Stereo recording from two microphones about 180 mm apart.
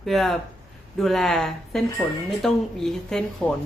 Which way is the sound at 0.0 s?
Centre (ahead or behind).